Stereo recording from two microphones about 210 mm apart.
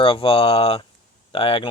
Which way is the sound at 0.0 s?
25° left (ahead or behind).